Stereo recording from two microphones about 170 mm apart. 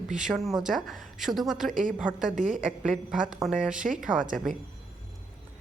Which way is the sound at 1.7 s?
50° right (ahead or behind).